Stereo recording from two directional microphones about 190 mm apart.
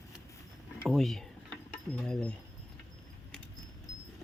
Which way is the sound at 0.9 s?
Centre (ahead or behind).